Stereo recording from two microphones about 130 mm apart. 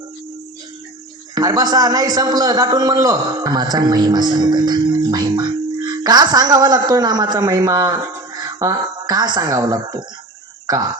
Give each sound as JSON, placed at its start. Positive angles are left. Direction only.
{"t": 1.4, "sound": "a man's voice", "side_deg": -30}